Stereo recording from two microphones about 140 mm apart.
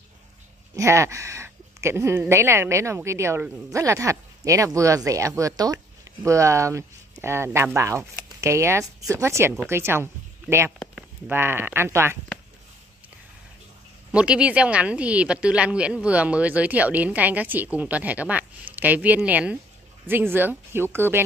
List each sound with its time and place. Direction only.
0.7 s speech: 20° right (ahead or behind)
11.2 s speech: 15° right (ahead or behind)
14.1 s speech: 10° right (ahead or behind)